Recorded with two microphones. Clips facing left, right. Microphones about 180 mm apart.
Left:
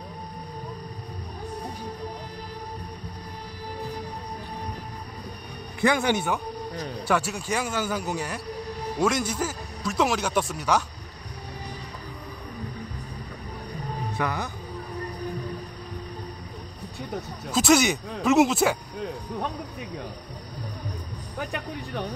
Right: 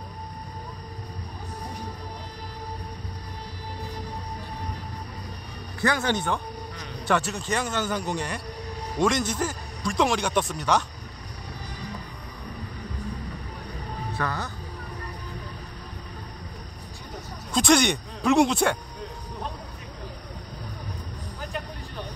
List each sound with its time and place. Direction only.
5.8 s a man's voice: 15° left (ahead or behind)
14.1 s speech: 15° left (ahead or behind)
17.5 s speech: 5° left (ahead or behind)
21.4 s music: 65° left (ahead or behind)